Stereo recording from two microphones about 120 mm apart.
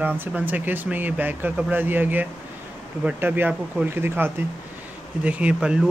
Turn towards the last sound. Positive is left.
turn(degrees=-5)  # may be behind; listen again after turning